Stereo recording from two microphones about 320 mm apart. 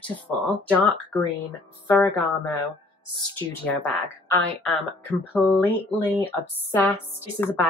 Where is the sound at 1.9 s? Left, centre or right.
Centre.